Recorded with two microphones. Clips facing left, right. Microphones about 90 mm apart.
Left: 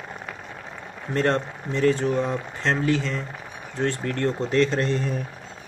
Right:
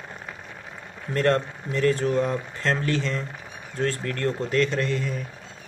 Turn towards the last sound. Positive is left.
turn(degrees=30)  # may be behind; listen again after turning